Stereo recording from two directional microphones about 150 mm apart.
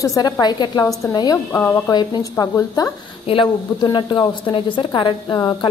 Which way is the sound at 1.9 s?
25° left (ahead or behind).